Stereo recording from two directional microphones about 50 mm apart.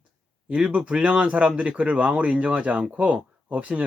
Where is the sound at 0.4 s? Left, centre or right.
Right.